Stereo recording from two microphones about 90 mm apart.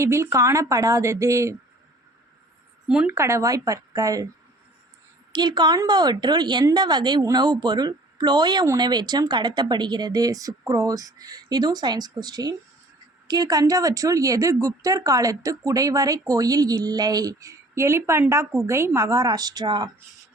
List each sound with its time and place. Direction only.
0.0 s speech: 35° right (ahead or behind)
2.8 s speech: 10° right (ahead or behind)
3.1 s speech: 30° right (ahead or behind)
5.3 s speech: 55° right (ahead or behind)